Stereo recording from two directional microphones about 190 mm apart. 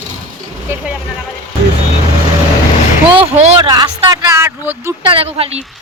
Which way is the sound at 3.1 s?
30° right (ahead or behind).